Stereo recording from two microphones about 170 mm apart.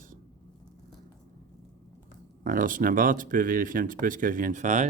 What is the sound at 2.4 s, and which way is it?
Speech, 50° right (ahead or behind).